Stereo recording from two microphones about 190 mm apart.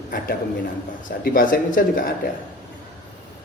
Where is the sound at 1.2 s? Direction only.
45° left (ahead or behind).